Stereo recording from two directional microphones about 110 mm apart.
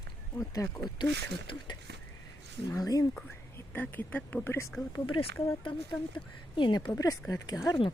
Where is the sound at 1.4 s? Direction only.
45° left (ahead or behind).